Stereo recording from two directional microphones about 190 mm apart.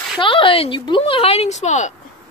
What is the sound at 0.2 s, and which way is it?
A woman's voice, 25° left (ahead or behind).